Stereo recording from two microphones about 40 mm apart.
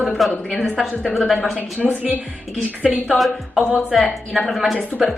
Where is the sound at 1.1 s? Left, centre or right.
Centre.